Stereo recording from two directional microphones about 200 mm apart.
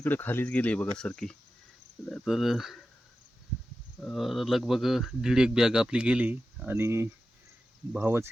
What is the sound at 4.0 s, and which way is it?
Speech, 5° left (ahead or behind).